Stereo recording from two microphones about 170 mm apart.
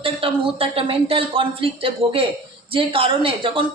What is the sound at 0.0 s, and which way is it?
A woman's voice, 35° right (ahead or behind).